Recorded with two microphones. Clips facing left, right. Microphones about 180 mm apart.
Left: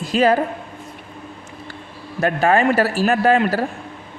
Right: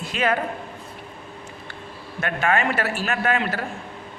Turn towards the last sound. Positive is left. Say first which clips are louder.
# left 7 dB
turn(degrees=40)  # may be behind; listen again after turning